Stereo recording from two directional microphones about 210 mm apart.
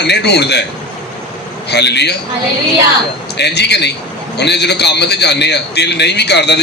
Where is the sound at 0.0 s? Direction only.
55° left (ahead or behind).